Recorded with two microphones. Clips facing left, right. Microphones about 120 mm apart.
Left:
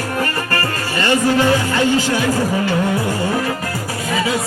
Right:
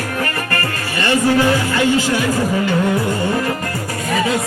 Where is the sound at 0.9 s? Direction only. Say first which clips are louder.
Right 1 dB; 20° left (ahead or behind).